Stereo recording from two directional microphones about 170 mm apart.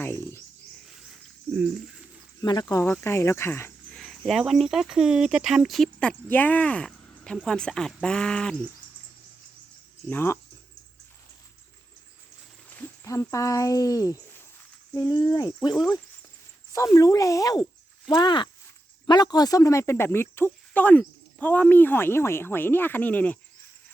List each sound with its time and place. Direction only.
0.0 s speech: 15° left (ahead or behind)
0.9 s a sound: centre (ahead or behind)
2.4 s speech: 25° left (ahead or behind)
3.9 s speech: centre (ahead or behind)
10.1 s speech: 15° left (ahead or behind)
12.7 s speech: 15° left (ahead or behind)
16.7 s speech: 20° left (ahead or behind)